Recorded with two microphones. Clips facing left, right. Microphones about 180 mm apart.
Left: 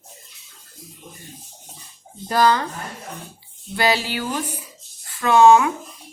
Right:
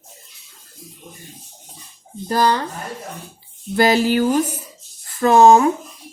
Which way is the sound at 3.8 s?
45° right (ahead or behind).